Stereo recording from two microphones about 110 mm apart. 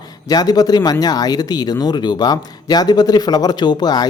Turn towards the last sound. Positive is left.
turn(degrees=40)  # may be behind; listen again after turning